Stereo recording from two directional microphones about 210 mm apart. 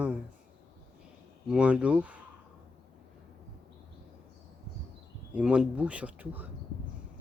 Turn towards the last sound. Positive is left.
turn(degrees=-5)  # may be behind; listen again after turning